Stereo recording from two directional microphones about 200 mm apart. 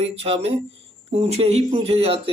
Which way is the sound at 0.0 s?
30° right (ahead or behind).